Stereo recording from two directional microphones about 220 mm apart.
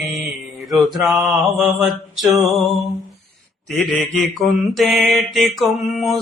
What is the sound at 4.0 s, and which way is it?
Mantra, centre (ahead or behind).